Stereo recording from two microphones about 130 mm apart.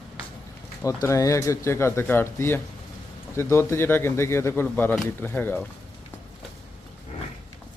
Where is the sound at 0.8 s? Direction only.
25° left (ahead or behind).